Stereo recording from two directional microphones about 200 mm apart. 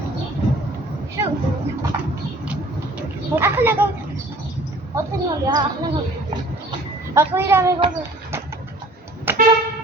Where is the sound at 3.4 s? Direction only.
10° right (ahead or behind).